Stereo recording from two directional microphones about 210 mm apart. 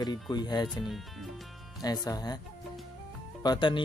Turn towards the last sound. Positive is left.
turn(degrees=20)  # may be behind; listen again after turning